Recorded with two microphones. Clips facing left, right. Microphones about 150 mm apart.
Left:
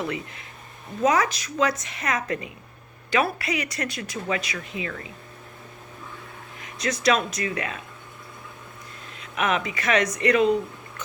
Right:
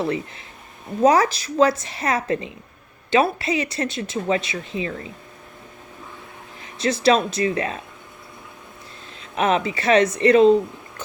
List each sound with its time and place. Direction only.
0.0 s a woman's voice: 30° right (ahead or behind)
6.6 s speech: 30° right (ahead or behind)
9.3 s speech: 30° right (ahead or behind)